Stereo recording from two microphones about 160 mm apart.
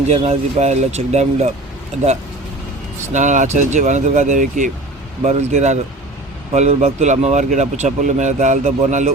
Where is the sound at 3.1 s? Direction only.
50° right (ahead or behind).